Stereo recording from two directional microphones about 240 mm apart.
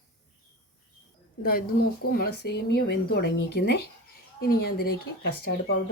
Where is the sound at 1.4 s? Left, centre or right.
Left.